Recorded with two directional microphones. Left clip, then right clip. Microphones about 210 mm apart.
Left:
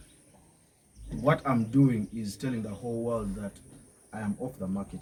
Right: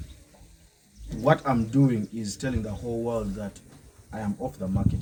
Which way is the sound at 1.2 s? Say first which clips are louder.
Right 4 dB; 20° right (ahead or behind).